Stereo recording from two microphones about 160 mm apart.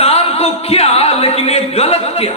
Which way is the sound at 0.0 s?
40° left (ahead or behind).